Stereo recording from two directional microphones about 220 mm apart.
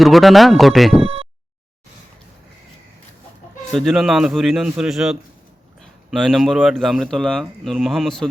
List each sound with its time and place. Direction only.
0.0 s speech: centre (ahead or behind)
1.0 s a sound: 25° right (ahead or behind)
3.7 s speech: centre (ahead or behind)